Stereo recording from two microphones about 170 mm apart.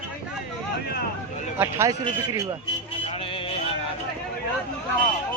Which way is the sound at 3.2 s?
30° left (ahead or behind).